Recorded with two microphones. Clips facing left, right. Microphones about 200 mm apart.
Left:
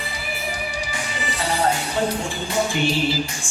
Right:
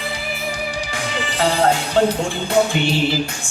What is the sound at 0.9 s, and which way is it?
Music, 90° right.